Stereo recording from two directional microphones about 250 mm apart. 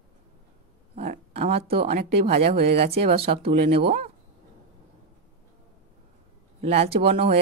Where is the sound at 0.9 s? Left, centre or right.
Right.